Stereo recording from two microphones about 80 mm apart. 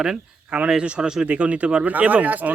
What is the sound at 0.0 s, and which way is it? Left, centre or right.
A man's voice, centre.